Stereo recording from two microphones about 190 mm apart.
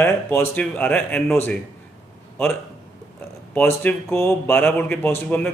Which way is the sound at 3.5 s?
10° left (ahead or behind).